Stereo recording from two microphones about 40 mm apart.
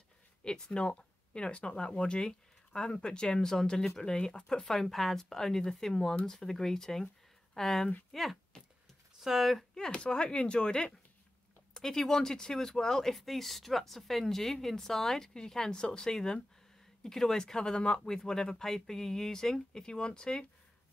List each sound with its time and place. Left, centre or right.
0.4 s speech: left; by 9.7 s centre
9.8 s speech: left
11.7 s speech: centre